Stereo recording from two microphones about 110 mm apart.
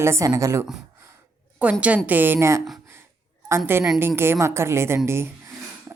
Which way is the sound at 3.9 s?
20° right (ahead or behind).